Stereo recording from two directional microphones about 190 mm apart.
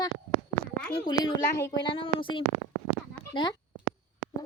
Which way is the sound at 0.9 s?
25° left (ahead or behind).